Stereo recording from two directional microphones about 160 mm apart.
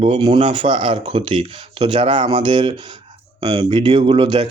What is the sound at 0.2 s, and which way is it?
Speech, 25° right (ahead or behind).